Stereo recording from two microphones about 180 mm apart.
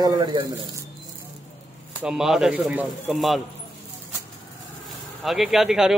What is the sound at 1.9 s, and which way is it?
Speech, 5° right (ahead or behind).